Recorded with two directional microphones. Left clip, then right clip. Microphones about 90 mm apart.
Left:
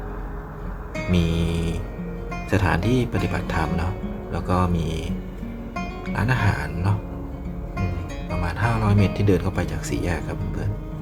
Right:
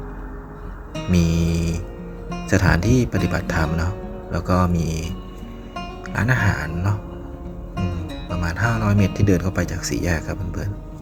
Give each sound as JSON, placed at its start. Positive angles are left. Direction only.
{"t": 1.1, "sound": "music", "side_deg": -60}
{"t": 2.5, "sound": "speech", "side_deg": -60}
{"t": 6.1, "sound": "music", "side_deg": -55}
{"t": 8.4, "sound": "speech", "side_deg": -50}